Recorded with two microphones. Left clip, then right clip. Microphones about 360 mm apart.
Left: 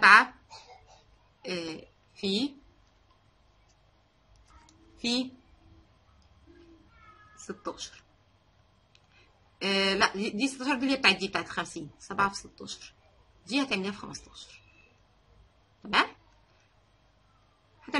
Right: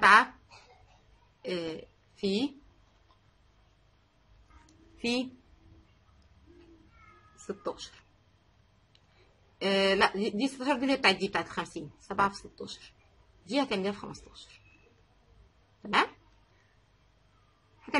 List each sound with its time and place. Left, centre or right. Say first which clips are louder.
0.0 s speech: left 2 dB; centre
1.5 s a woman's voice: right 1 dB; centre
4.6 s a sound: left 1 dB; centre
7.4 s speech: right 1 dB; centre
9.6 s speech: even; centre